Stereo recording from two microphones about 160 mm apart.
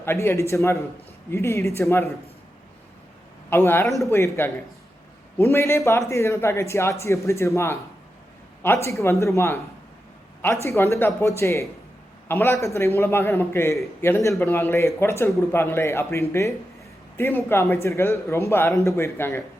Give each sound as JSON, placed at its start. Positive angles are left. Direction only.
{"t": 0.0, "sound": "a man's voice", "side_deg": 15}
{"t": 3.5, "sound": "a man's voice", "side_deg": 15}